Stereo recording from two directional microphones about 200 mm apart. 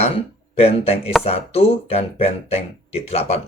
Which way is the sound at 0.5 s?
30° left (ahead or behind).